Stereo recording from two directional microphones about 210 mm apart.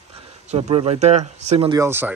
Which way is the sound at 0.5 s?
30° right (ahead or behind).